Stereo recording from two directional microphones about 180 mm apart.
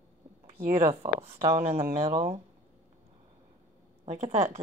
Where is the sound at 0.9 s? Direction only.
30° right (ahead or behind).